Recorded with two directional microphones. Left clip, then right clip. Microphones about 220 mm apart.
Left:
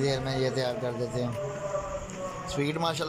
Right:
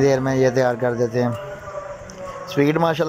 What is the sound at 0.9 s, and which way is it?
Speech, 35° right (ahead or behind).